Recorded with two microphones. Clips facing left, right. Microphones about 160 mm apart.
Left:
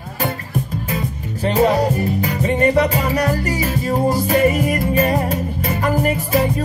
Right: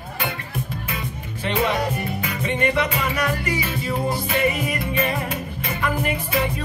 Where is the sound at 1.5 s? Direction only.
40° left (ahead or behind).